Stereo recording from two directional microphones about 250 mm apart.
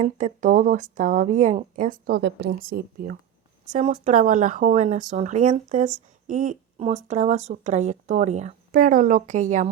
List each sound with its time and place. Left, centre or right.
0.0 s speech: right